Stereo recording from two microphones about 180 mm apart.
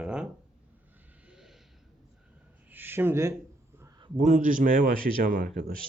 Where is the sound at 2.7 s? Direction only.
10° right (ahead or behind).